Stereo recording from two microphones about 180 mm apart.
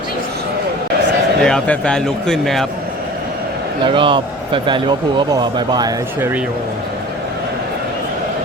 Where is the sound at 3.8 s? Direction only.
30° right (ahead or behind).